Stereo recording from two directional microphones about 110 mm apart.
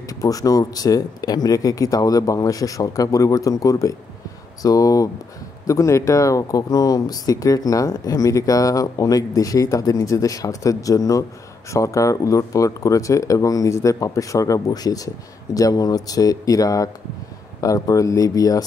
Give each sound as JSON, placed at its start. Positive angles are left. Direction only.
{"t": 0.1, "sound": "speech", "side_deg": 35}